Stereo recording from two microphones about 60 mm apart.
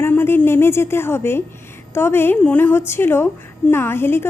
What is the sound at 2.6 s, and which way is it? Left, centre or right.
A woman's voice, left.